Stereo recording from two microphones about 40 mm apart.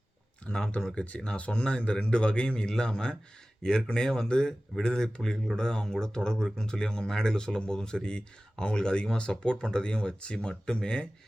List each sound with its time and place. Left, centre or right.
0.4 s speech: left